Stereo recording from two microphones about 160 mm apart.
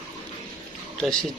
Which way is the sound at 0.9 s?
5° left (ahead or behind).